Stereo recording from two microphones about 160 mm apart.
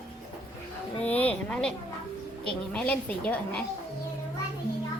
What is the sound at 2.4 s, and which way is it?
A woman's voice, 5° left (ahead or behind).